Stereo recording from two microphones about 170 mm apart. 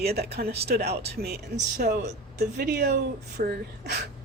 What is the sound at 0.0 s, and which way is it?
Speech, 70° right (ahead or behind).